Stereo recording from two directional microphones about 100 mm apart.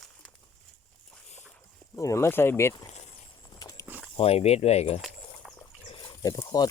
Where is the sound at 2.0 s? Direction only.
30° left (ahead or behind).